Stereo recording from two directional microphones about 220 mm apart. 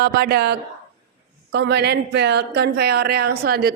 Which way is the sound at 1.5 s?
50° right (ahead or behind).